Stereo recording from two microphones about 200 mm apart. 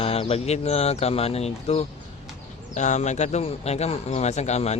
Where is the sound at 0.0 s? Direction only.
30° left (ahead or behind).